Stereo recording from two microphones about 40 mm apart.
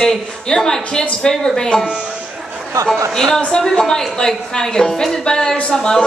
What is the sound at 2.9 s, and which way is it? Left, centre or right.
Speech, centre.